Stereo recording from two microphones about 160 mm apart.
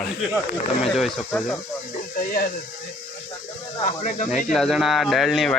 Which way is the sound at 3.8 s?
50° left (ahead or behind).